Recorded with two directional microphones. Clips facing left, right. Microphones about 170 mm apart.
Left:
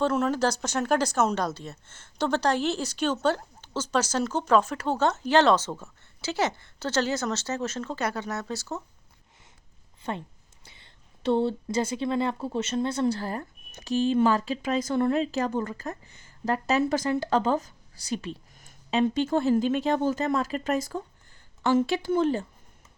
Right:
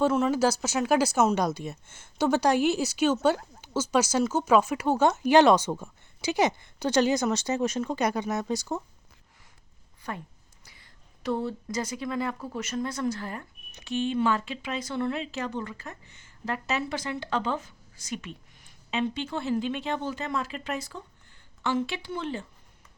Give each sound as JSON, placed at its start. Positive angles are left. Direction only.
{"t": 0.0, "sound": "speech", "side_deg": -5}
{"t": 10.0, "sound": "a woman's voice", "side_deg": 25}